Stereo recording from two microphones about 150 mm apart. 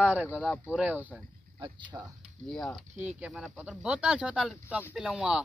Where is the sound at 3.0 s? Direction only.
10° right (ahead or behind).